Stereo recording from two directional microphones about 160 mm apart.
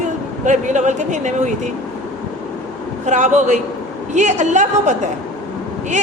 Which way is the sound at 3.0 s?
45° right (ahead or behind).